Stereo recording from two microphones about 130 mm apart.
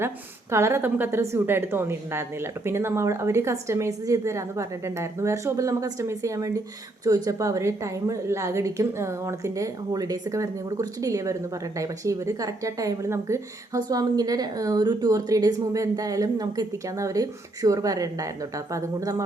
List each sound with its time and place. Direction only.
0.5 s speech: 20° right (ahead or behind)